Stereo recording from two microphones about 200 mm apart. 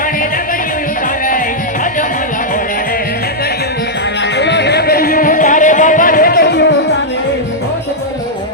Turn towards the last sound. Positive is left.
turn(degrees=60)  # may be behind; listen again after turning